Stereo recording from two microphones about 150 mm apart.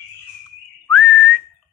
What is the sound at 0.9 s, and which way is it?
Whistling, centre (ahead or behind).